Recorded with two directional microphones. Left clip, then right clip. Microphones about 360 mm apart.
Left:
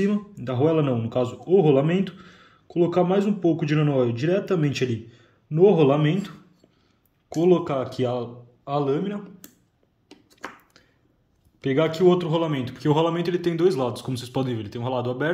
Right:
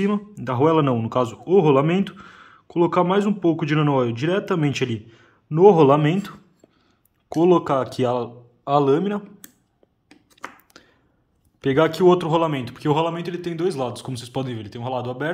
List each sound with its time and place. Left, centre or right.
0.0 s a man's voice: centre
10.3 s a sound: centre
11.6 s a man's voice: centre